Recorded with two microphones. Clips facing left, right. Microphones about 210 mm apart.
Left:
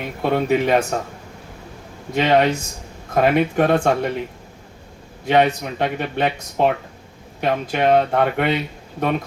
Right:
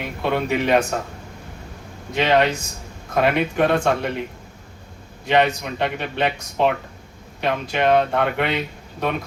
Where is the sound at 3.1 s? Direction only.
45° left (ahead or behind).